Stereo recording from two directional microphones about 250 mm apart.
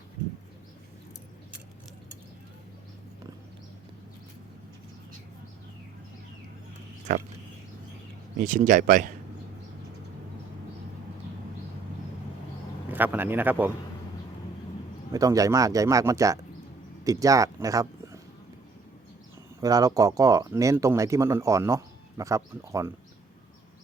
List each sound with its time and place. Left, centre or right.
8.4 s speech: right
12.9 s speech: centre
15.1 s speech: centre
19.6 s speech: centre